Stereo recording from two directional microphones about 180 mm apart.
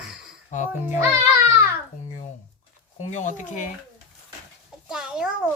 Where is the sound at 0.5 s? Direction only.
40° left (ahead or behind).